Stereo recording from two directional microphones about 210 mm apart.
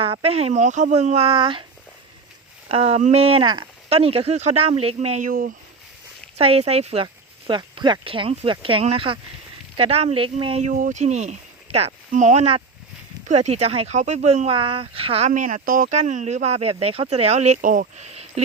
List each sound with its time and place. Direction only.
0.0 s speech: 25° right (ahead or behind)
2.6 s speech: 30° right (ahead or behind)
6.3 s speech: 30° right (ahead or behind)